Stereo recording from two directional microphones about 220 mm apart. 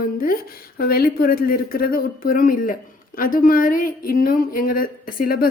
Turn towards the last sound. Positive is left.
turn(degrees=40)  # may be behind; listen again after turning